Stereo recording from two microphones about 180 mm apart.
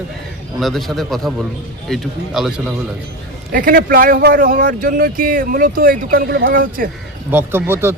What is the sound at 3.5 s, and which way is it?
Speech, 50° right (ahead or behind).